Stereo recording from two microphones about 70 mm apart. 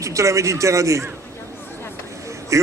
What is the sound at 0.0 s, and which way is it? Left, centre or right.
A man's voice, right.